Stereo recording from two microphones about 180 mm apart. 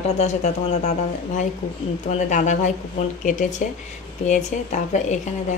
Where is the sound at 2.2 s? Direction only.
45° left (ahead or behind).